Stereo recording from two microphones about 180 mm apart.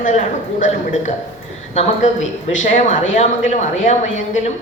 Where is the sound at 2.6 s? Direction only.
45° left (ahead or behind).